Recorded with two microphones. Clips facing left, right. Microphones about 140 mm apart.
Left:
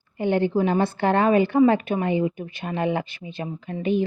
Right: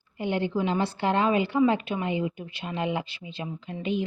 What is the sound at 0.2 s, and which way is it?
A woman's voice, 50° left (ahead or behind).